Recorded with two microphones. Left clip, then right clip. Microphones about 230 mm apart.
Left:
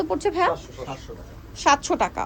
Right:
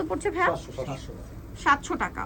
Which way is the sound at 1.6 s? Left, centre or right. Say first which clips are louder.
Left 4 dB; centre.